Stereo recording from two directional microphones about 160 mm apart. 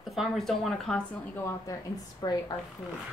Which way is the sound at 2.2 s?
30° left (ahead or behind).